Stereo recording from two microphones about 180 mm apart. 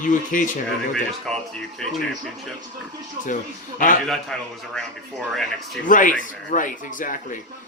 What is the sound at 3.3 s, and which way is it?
Speech, 45° left (ahead or behind).